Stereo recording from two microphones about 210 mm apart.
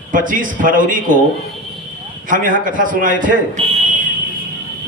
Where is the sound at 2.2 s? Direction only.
40° right (ahead or behind).